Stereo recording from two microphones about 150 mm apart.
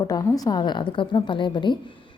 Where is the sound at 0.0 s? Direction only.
25° left (ahead or behind).